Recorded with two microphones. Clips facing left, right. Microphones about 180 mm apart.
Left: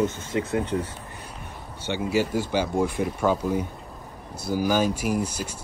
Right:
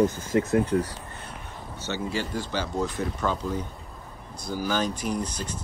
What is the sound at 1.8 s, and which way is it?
Speech, 10° left (ahead or behind).